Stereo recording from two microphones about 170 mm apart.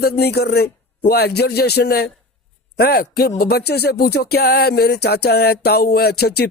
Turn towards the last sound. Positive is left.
turn(degrees=70)  # may be behind; listen again after turning